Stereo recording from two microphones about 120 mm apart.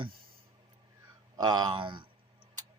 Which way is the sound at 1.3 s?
35° right (ahead or behind).